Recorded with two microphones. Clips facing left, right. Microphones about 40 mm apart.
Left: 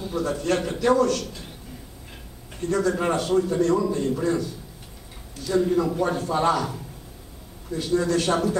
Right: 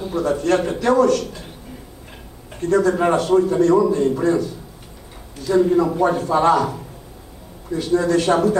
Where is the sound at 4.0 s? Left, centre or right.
Centre.